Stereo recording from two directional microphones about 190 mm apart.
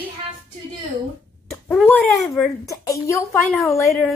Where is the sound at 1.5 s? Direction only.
10° left (ahead or behind).